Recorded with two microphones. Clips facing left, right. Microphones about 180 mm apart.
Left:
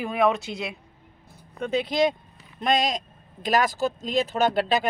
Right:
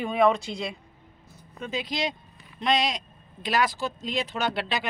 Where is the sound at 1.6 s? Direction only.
60° left (ahead or behind).